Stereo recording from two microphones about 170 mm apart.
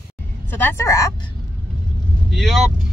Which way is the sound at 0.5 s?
10° left (ahead or behind).